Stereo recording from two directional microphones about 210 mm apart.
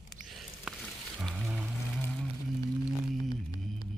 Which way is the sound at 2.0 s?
5° left (ahead or behind).